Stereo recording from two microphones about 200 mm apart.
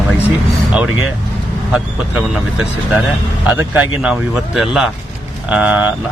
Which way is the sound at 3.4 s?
10° right (ahead or behind).